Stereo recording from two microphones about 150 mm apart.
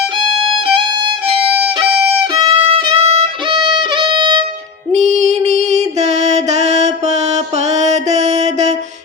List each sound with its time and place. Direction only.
2.4 s violin: 35° right (ahead or behind)
3.5 s violin: 30° right (ahead or behind)
4.9 s female singing: 50° right (ahead or behind)